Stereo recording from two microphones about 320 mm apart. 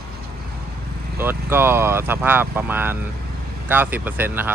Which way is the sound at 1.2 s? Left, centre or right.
Centre.